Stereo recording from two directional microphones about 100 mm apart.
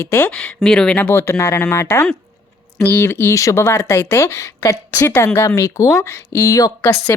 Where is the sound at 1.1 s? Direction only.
25° left (ahead or behind).